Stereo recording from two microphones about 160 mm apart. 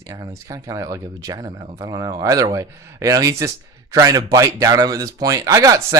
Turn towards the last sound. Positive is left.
turn(degrees=-20)  # may be behind; listen again after turning